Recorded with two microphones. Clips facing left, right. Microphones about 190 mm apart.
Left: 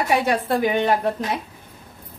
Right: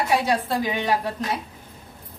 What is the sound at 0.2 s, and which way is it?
Speech, 60° left (ahead or behind).